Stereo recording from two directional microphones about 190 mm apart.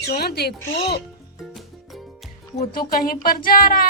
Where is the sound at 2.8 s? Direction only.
50° left (ahead or behind).